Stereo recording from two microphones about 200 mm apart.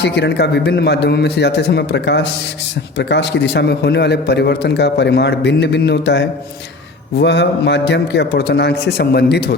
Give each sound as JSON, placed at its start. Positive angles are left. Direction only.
{"t": 0.0, "sound": "a man's voice", "side_deg": 60}